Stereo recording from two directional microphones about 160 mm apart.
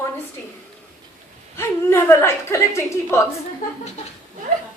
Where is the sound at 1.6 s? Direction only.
15° left (ahead or behind).